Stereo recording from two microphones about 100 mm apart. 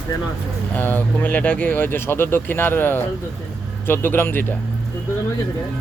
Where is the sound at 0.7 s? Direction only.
20° left (ahead or behind).